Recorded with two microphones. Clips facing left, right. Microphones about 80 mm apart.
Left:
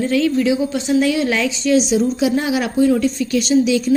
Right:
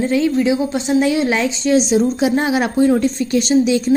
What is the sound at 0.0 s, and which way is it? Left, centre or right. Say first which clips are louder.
A woman's voice: right 1 dB; right.